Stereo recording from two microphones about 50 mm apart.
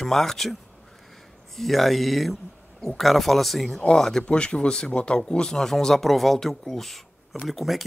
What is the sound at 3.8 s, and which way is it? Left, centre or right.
Speech, centre.